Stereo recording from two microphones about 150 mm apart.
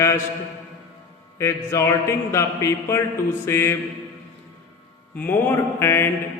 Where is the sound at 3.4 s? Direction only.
15° left (ahead or behind).